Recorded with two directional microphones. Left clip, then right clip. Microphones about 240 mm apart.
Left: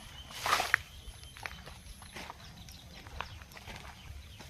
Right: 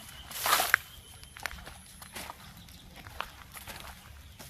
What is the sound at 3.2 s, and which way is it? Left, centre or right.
Horse, right.